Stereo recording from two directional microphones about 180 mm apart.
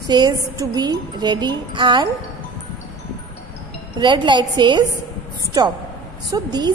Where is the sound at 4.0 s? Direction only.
25° right (ahead or behind).